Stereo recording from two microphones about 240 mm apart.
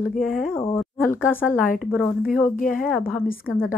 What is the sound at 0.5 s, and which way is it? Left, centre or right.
A woman's voice, centre.